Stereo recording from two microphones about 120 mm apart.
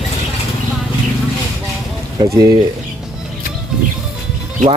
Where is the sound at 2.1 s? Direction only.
35° right (ahead or behind).